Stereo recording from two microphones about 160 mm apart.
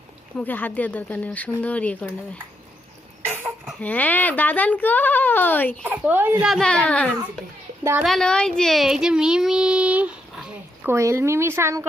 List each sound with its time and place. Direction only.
0.3 s speech: 10° left (ahead or behind)
3.2 s cough: 15° right (ahead or behind)
3.8 s speech: 10° left (ahead or behind)
5.8 s speech: 10° right (ahead or behind)
6.4 s a woman's voice: centre (ahead or behind)
10.9 s speech: 15° right (ahead or behind)